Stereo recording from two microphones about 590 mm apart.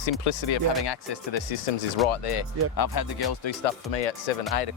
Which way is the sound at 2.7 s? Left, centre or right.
Left.